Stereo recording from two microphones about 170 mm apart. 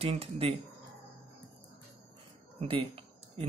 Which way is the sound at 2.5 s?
35° right (ahead or behind).